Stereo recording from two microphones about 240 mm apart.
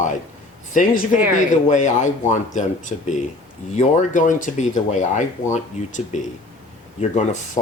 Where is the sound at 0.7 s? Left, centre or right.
Left.